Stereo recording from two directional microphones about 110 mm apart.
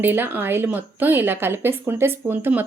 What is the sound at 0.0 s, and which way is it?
Speech, 20° right (ahead or behind).